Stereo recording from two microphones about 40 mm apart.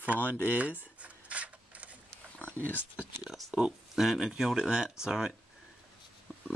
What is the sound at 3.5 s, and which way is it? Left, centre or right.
Speech, centre.